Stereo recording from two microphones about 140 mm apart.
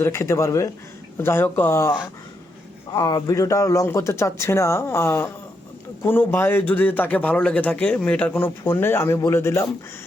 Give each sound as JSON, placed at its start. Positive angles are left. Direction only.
{"t": 0.0, "sound": "a man's voice", "side_deg": 20}
{"t": 2.9, "sound": "a man's voice", "side_deg": 25}